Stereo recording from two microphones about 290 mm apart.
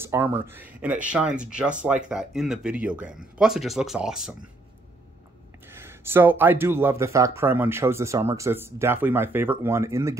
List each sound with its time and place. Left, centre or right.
0.0 s speech: centre
5.7 s speech: centre